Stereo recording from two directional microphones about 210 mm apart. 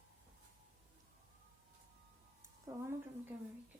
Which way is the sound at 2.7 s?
15° right (ahead or behind).